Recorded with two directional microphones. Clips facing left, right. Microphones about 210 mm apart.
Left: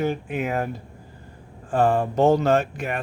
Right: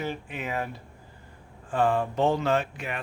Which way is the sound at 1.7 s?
45° left (ahead or behind).